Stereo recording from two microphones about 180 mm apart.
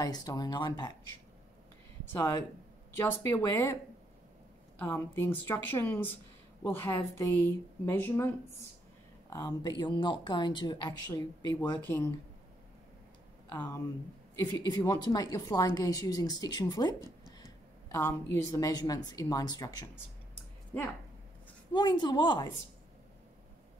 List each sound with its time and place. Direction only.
0.0 s a woman's voice: 20° left (ahead or behind)
2.1 s a woman's voice: 15° left (ahead or behind)
4.7 s a woman's voice: 10° left (ahead or behind)
13.5 s a woman's voice: 20° left (ahead or behind)
21.7 s a woman's voice: 25° left (ahead or behind)